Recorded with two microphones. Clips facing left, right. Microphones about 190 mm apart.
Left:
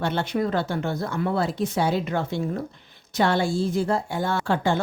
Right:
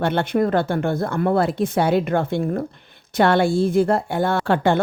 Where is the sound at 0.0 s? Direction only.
55° right (ahead or behind).